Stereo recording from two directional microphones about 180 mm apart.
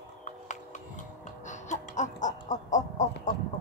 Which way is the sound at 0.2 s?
45° left (ahead or behind).